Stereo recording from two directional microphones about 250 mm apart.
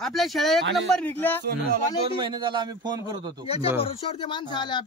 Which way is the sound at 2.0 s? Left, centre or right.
Centre.